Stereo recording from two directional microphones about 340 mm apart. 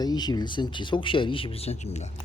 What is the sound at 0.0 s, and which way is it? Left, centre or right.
Speech, centre.